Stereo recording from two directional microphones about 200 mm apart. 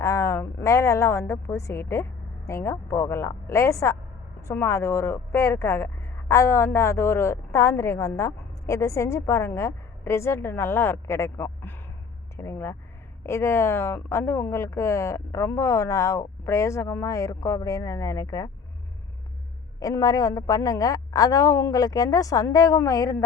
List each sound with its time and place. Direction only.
0.0 s a woman's voice: 15° left (ahead or behind)
19.8 s speech: 15° left (ahead or behind)